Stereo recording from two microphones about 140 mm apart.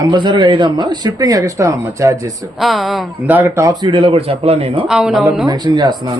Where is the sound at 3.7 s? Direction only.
25° right (ahead or behind).